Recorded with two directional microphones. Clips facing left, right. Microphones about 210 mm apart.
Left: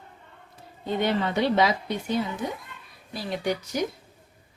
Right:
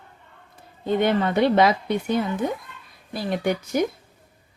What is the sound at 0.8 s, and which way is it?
A woman's voice, 55° right (ahead or behind).